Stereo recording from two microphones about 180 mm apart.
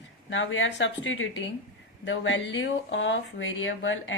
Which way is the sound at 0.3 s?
90° left.